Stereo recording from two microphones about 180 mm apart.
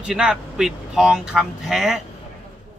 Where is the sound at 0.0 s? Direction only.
5° right (ahead or behind).